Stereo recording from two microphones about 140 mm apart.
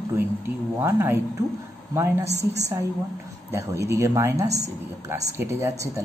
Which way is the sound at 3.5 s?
20° right (ahead or behind).